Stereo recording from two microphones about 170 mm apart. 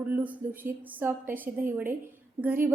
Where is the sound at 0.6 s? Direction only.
10° right (ahead or behind).